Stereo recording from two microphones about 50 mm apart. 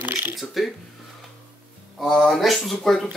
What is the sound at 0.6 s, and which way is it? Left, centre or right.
Speech, centre.